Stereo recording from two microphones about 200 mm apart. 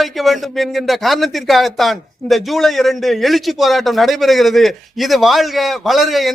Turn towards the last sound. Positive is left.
turn(degrees=0)  # may be behind; listen again after turning